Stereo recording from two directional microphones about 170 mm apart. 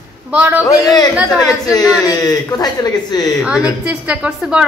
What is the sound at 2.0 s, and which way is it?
Speech, 20° left (ahead or behind).